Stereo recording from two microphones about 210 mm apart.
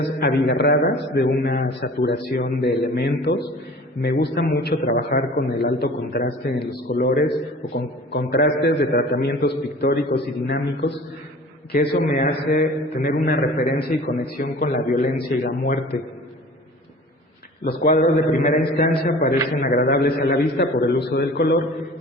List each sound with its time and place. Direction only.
0.2 s a man's voice: 50° left (ahead or behind)
17.7 s a man's voice: 45° left (ahead or behind)